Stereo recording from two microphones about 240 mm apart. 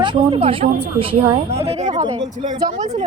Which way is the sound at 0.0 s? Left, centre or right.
Right.